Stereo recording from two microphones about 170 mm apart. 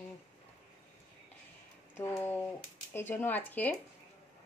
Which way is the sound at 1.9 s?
15° left (ahead or behind).